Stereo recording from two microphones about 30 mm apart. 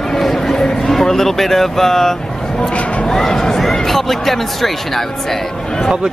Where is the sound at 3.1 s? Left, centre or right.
Centre.